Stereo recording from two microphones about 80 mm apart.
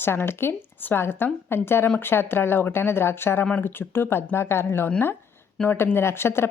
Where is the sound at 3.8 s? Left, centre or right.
Left.